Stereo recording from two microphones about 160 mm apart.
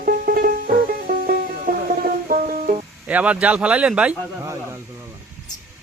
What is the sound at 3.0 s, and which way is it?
Speech, 10° right (ahead or behind).